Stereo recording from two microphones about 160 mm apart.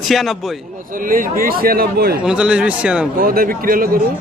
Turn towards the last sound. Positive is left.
turn(degrees=-60)  # may be behind; listen again after turning